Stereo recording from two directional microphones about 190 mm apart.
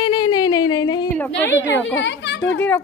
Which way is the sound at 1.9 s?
70° left (ahead or behind).